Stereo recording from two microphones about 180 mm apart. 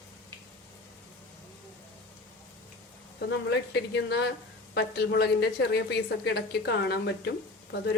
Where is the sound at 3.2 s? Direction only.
70° left (ahead or behind).